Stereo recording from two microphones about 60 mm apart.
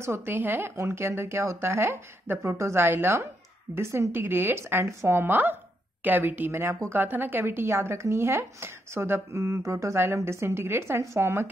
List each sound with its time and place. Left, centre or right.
0.0 s a woman's voice: right
7.0 s speech: right